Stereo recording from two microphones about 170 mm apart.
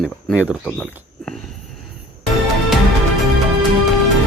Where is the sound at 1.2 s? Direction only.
Centre (ahead or behind).